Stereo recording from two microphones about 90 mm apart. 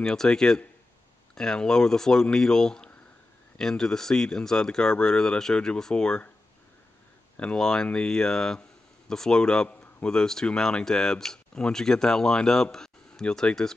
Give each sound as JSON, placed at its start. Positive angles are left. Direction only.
{"t": 0.0, "sound": "speech", "side_deg": 5}
{"t": 7.3, "sound": "speech", "side_deg": 10}